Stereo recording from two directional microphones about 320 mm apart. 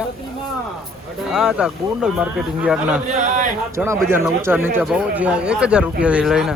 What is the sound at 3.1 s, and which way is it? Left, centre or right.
Speech, right.